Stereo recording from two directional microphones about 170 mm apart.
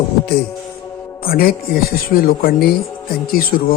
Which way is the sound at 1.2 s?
60° left (ahead or behind).